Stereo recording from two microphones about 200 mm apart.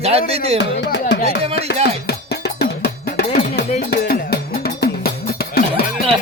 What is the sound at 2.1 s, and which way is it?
Cowbell, 55° left (ahead or behind).